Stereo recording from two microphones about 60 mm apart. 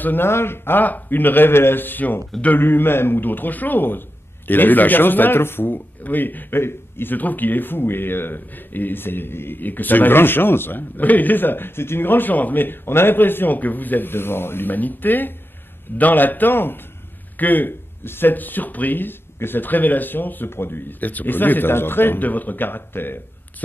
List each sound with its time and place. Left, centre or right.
0.0 s speech: left